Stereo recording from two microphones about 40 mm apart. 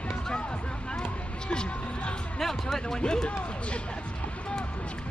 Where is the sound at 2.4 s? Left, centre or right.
Centre.